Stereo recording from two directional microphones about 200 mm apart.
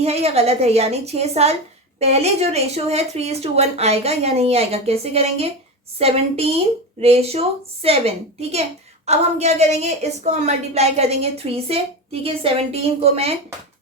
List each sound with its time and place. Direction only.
0.0 s a woman's voice: 30° right (ahead or behind)